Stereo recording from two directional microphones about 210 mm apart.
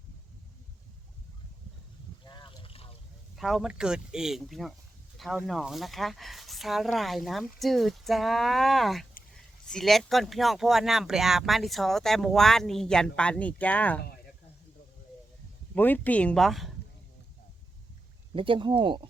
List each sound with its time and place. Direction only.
2.2 s a sound: 20° left (ahead or behind)
3.3 s speech: centre (ahead or behind)
15.7 s speech: 10° left (ahead or behind)
18.3 s speech: 25° right (ahead or behind)